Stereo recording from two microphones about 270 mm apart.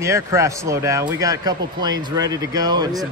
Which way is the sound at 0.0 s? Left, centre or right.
Centre.